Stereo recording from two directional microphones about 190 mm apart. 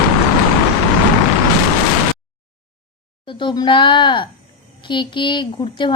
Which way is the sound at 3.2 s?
25° left (ahead or behind).